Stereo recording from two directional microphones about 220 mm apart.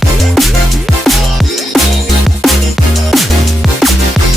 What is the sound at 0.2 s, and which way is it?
Music, centre (ahead or behind).